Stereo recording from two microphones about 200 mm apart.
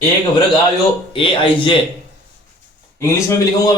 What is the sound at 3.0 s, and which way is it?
Speech, 15° left (ahead or behind).